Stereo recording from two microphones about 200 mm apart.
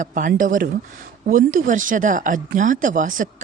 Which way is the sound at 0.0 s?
40° right (ahead or behind).